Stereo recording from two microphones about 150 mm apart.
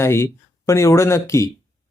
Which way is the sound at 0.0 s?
15° left (ahead or behind).